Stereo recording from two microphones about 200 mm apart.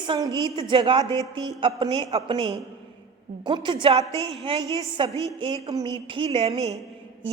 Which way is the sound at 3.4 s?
25° right (ahead or behind).